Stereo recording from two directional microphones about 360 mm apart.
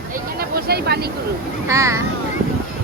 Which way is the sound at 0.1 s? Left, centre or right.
Right.